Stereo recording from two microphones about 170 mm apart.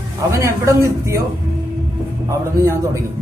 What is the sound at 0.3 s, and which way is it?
Speech, 15° right (ahead or behind).